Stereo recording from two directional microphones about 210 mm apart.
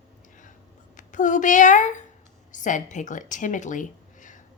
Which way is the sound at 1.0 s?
35° left (ahead or behind).